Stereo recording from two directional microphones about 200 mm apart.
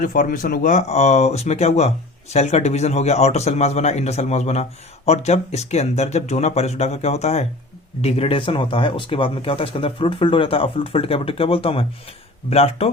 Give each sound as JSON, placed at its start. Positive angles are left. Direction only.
{"t": 0.0, "sound": "speech", "side_deg": 45}